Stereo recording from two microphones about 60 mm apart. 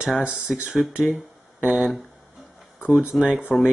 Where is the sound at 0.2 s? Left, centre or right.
Centre.